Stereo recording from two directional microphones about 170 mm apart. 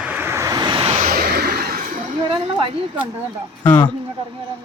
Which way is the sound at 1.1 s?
65° right (ahead or behind).